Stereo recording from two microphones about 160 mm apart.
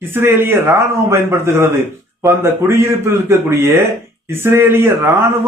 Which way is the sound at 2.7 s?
15° right (ahead or behind).